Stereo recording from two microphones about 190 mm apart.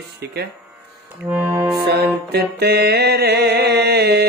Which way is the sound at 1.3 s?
10° right (ahead or behind).